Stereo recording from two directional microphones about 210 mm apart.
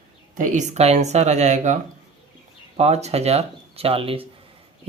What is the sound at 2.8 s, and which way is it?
Speech, 30° right (ahead or behind).